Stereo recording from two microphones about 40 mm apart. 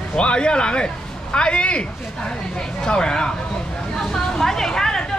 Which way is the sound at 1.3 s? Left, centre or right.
Left.